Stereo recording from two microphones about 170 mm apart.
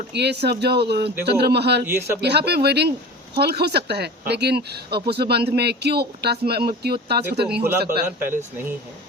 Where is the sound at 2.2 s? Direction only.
75° right (ahead or behind).